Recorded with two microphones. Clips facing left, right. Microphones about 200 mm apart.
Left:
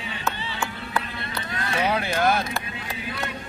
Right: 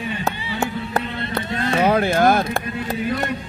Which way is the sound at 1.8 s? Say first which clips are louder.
Right 7 dB; 50° right (ahead or behind).